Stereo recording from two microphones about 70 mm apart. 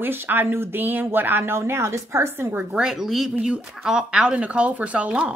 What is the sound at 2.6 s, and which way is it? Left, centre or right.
Speech, right.